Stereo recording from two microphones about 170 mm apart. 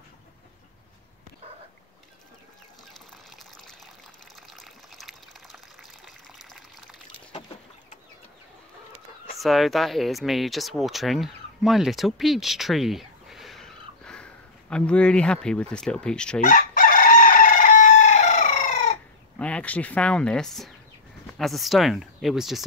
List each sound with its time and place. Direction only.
4.5 s water: centre (ahead or behind)
9.4 s speech: centre (ahead or behind)
16.4 s chicken: 50° left (ahead or behind)
19.3 s speech: 10° left (ahead or behind)